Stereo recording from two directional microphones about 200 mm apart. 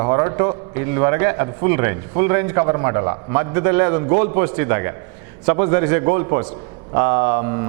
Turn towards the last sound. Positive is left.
turn(degrees=-15)  # may be behind; listen again after turning